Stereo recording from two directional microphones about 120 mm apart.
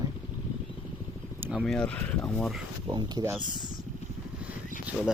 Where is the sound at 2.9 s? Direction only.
35° right (ahead or behind).